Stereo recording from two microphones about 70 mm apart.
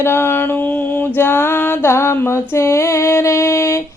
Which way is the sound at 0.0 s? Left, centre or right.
Left.